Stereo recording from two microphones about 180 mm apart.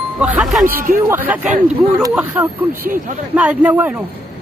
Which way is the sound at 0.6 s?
50° right (ahead or behind).